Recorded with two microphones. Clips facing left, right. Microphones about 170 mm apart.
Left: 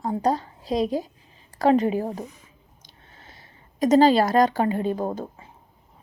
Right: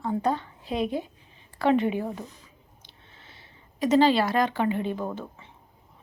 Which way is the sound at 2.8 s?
45° left (ahead or behind).